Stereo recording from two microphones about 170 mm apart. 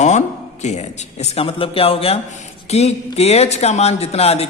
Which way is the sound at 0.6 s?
40° left (ahead or behind).